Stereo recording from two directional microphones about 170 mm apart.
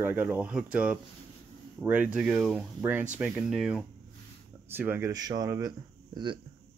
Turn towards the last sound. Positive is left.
turn(degrees=-25)  # may be behind; listen again after turning